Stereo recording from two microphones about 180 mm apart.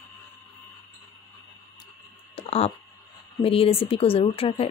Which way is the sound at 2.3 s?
35° left (ahead or behind).